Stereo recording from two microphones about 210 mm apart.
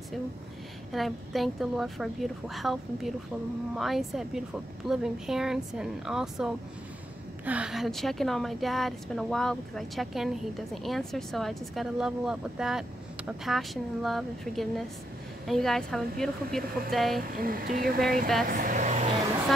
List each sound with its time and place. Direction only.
0.9 s a woman's voice: centre (ahead or behind)
17.4 s speech: 45° right (ahead or behind)